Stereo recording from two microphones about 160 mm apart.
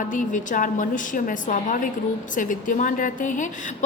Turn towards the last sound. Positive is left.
turn(degrees=55)  # may be behind; listen again after turning